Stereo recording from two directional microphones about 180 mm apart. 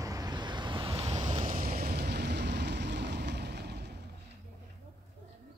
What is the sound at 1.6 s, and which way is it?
Vehicle, 55° right (ahead or behind).